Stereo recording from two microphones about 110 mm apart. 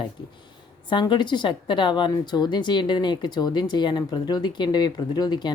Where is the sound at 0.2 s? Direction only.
45° left (ahead or behind).